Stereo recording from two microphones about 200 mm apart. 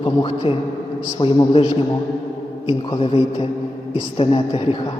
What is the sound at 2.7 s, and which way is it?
A man's voice, 25° left (ahead or behind).